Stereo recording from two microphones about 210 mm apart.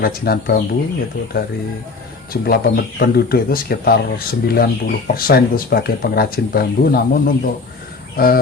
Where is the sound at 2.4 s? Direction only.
45° left (ahead or behind).